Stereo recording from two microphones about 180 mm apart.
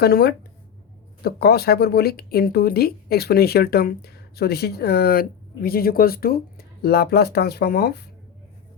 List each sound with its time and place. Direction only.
0.0 s speech: 60° left (ahead or behind)